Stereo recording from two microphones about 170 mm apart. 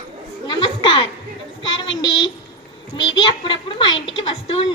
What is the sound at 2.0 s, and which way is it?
A woman's voice, 25° left (ahead or behind).